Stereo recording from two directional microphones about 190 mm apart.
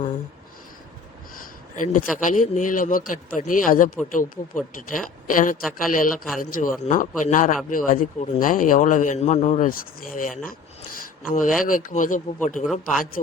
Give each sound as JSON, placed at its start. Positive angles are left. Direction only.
{"t": 1.7, "sound": "speech", "side_deg": 45}
{"t": 11.0, "sound": "a sound", "side_deg": 45}
{"t": 11.6, "sound": "speech", "side_deg": 45}